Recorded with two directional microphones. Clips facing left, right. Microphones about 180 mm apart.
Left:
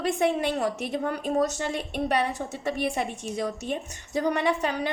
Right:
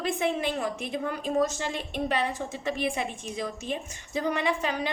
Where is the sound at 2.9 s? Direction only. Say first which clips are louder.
Left 3 dB; 50° left (ahead or behind).